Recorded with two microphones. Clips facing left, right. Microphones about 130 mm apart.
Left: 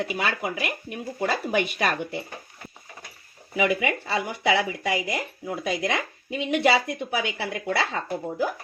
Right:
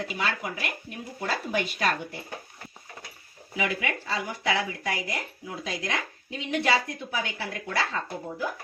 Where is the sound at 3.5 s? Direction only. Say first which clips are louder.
Left 6 dB; 60° left (ahead or behind).